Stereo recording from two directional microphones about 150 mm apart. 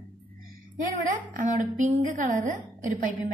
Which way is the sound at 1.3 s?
60° right (ahead or behind).